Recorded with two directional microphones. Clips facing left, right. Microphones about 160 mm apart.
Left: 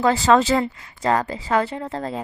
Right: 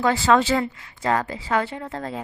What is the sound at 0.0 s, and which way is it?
A woman's voice, 40° left (ahead or behind).